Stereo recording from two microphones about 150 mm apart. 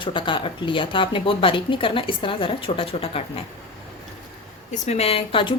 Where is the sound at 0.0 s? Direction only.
35° left (ahead or behind).